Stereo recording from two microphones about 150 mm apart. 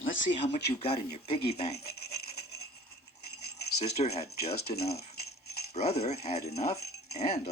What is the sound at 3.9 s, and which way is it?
Speech, 45° left (ahead or behind).